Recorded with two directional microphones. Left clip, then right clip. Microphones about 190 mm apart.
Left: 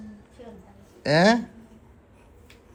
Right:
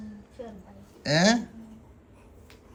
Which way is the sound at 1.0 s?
Centre (ahead or behind).